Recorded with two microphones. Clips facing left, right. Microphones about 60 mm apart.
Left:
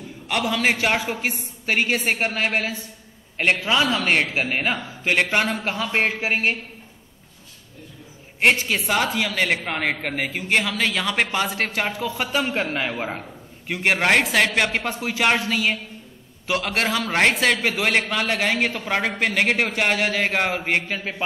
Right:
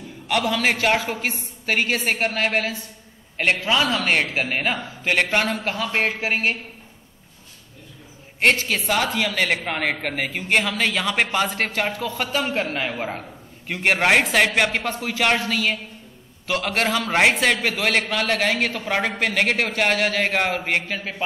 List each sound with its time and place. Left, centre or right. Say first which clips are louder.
0.3 s a man's voice: right 1 dB; centre
5.5 s speech: even; left
8.5 s a man's voice: even; centre
11.9 s speech: even; left
12.2 s a man's voice: even; centre
13.8 s a man's voice: right 1 dB; centre
14.9 s a man's voice: even; centre
17.7 s a man's voice: even; centre